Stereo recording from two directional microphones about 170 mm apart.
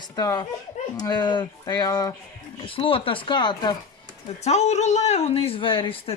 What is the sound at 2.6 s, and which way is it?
Speech, 30° left (ahead or behind).